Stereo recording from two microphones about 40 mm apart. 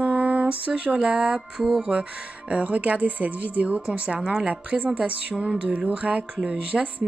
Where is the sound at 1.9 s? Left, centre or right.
Right.